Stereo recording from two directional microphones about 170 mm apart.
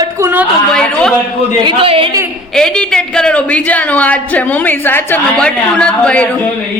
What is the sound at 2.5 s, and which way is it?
Speech, 5° left (ahead or behind).